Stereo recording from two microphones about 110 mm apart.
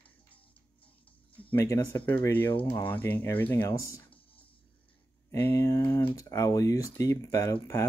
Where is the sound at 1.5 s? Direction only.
20° left (ahead or behind).